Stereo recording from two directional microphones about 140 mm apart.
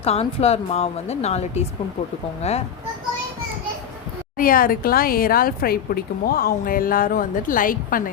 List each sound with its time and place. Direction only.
0.0 s a woman's voice: 45° left (ahead or behind)
4.4 s a woman's voice: 90° left